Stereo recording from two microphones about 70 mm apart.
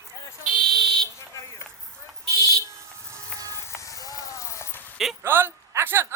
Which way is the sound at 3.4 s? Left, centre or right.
Right.